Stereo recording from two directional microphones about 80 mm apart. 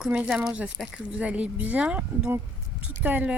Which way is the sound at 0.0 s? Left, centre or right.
Centre.